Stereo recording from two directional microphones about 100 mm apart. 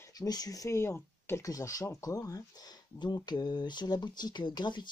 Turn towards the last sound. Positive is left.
turn(degrees=50)  # may be behind; listen again after turning